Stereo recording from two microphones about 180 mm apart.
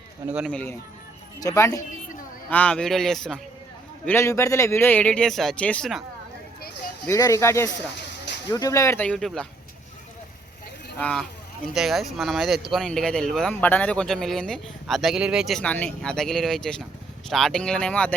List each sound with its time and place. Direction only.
0.3 s speech: 5° right (ahead or behind)
0.5 s a man's voice: 10° left (ahead or behind)
4.0 s a man's voice: 15° left (ahead or behind)
7.0 s a man's voice: 15° left (ahead or behind)
11.0 s speech: 5° left (ahead or behind)